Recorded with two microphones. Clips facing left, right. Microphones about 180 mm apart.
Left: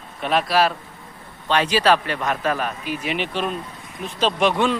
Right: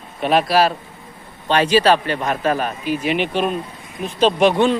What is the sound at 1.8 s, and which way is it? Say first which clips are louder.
Speech: right 2 dB; 30° right (ahead or behind).